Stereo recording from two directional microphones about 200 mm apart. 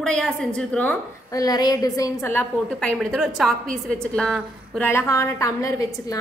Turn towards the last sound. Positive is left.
turn(degrees=15)  # may be behind; listen again after turning